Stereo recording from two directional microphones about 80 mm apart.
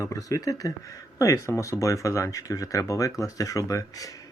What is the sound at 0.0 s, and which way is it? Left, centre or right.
Speech, left.